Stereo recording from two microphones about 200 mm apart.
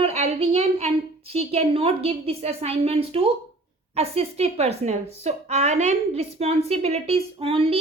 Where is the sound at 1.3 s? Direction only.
30° right (ahead or behind).